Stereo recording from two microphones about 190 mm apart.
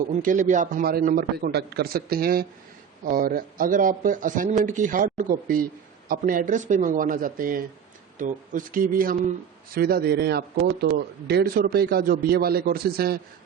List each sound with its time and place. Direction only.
0.2 s a man's voice: 45° right (ahead or behind)